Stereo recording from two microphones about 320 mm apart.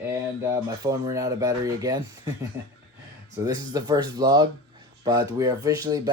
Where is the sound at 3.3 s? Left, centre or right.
Centre.